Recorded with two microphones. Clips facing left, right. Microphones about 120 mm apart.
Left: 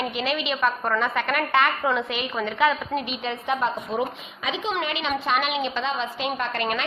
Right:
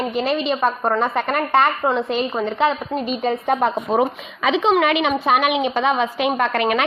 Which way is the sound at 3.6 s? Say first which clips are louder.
Right 7 dB; 70° right (ahead or behind).